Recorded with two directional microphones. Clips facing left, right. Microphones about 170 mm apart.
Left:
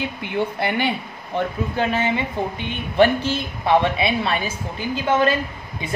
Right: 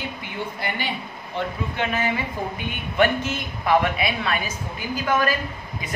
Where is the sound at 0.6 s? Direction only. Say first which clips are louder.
Left 6 dB; 60° left (ahead or behind).